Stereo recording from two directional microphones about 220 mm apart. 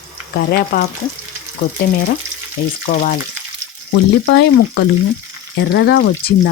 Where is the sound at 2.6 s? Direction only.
45° left (ahead or behind).